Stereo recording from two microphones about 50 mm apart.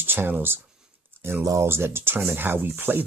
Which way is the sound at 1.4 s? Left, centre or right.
Right.